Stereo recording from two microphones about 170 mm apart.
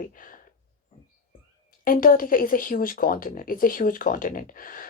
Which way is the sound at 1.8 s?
55° left (ahead or behind).